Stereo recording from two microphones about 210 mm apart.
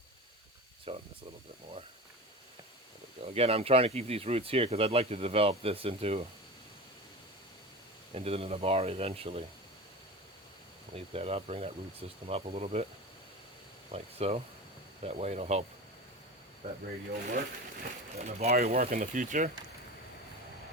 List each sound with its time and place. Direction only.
0.9 s speech: 25° right (ahead or behind)
3.2 s speech: 30° right (ahead or behind)
8.1 s speech: 30° right (ahead or behind)
10.9 s speech: 30° right (ahead or behind)
13.9 s speech: 30° right (ahead or behind)
18.2 s speech: 30° right (ahead or behind)
18.5 s speech: 45° right (ahead or behind)